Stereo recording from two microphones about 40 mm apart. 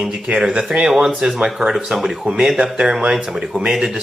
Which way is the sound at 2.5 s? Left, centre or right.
Right.